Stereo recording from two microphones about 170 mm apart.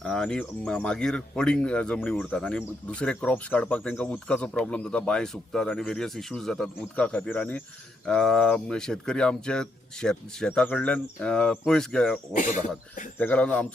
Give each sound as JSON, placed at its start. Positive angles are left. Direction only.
{"t": 0.0, "sound": "speech", "side_deg": 5}
{"t": 12.4, "sound": "speech", "side_deg": 45}
{"t": 13.1, "sound": "speech", "side_deg": 10}